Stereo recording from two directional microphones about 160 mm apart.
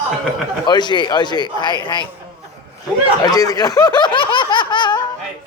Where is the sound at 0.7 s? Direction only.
25° left (ahead or behind).